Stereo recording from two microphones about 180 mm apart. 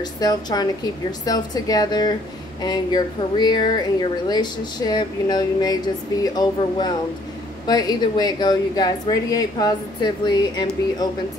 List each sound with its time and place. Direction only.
0.0 s a woman's voice: 20° left (ahead or behind)